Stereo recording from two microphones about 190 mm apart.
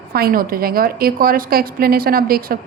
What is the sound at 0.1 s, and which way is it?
A woman's voice, 50° right (ahead or behind).